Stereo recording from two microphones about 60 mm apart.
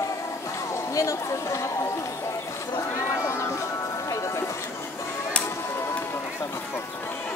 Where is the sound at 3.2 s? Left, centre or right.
Left.